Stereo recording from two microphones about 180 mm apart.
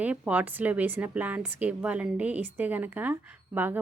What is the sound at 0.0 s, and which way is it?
A woman's voice, 10° right (ahead or behind).